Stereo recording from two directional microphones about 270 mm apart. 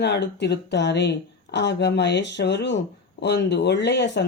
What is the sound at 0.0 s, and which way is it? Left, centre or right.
Speech, left.